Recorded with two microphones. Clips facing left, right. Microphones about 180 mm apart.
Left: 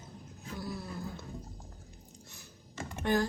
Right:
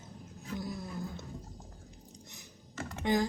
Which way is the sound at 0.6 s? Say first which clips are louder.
Left 1 dB; 20° right (ahead or behind).